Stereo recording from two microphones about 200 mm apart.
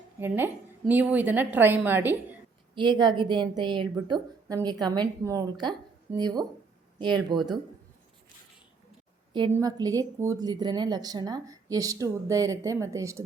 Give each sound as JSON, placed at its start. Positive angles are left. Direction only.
{"t": 0.2, "sound": "speech", "side_deg": -10}
{"t": 2.7, "sound": "a woman's voice", "side_deg": -25}
{"t": 9.5, "sound": "speech", "side_deg": -15}